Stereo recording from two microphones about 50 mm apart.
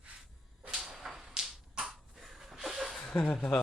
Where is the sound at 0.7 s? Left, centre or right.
Centre.